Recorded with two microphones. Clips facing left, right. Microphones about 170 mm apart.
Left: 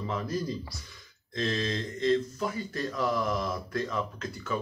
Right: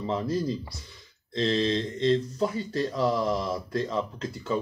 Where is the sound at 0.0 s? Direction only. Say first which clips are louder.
Right 4 dB; 25° right (ahead or behind).